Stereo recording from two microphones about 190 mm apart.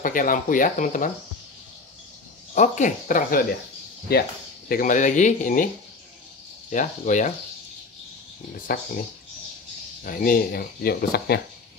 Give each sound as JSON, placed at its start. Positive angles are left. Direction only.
{"t": 0.0, "sound": "speech", "side_deg": 45}
{"t": 2.5, "sound": "speech", "side_deg": 40}
{"t": 4.6, "sound": "speech", "side_deg": 45}
{"t": 6.7, "sound": "speech", "side_deg": 40}
{"t": 8.7, "sound": "speech", "side_deg": 50}
{"t": 10.0, "sound": "speech", "side_deg": 45}